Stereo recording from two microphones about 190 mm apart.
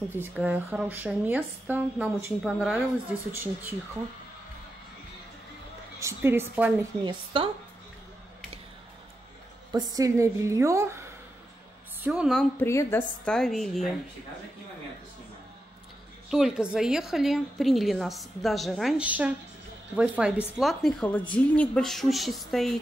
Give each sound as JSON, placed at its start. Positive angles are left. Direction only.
{"t": 0.1, "sound": "speech", "side_deg": -10}
{"t": 5.9, "sound": "speech", "side_deg": -15}
{"t": 7.0, "sound": "speech", "side_deg": -25}
{"t": 9.7, "sound": "a woman's voice", "side_deg": -20}
{"t": 12.5, "sound": "a woman's voice", "side_deg": 15}
{"t": 16.3, "sound": "a woman's voice", "side_deg": -5}